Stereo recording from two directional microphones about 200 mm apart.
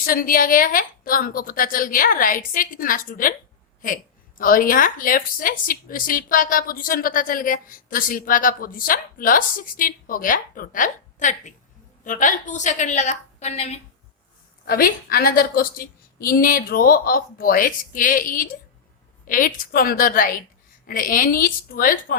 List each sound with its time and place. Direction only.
0.0 s a woman's voice: 45° left (ahead or behind)
14.7 s a woman's voice: 50° left (ahead or behind)